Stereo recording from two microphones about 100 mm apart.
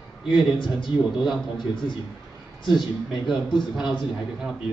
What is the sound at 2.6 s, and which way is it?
Speech, 50° left (ahead or behind).